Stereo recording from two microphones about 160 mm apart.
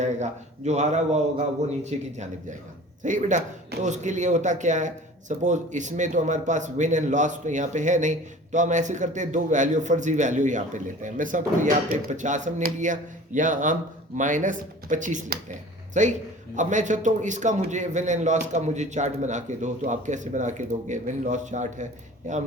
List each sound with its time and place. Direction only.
0.0 s a man's voice: 45° right (ahead or behind)